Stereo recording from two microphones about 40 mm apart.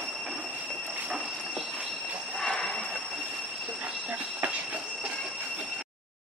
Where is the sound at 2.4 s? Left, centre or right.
Centre.